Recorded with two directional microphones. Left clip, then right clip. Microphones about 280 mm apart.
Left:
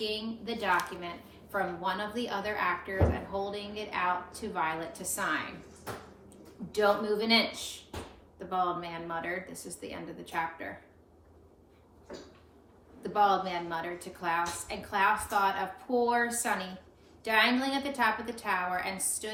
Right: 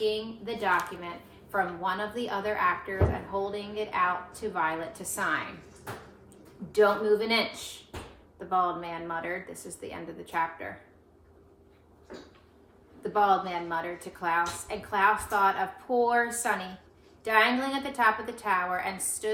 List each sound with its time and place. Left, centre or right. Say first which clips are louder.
0.0 s speech: right 5 dB; centre
6.7 s speech: right 4 dB; centre
13.0 s speech: right 2 dB; centre